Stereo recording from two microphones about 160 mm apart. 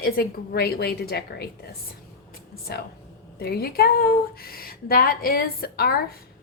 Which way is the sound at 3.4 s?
80° left.